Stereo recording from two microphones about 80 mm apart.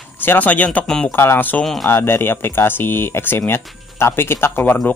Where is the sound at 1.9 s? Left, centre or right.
Left.